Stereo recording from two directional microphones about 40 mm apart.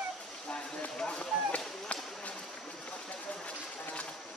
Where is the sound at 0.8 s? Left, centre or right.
Left.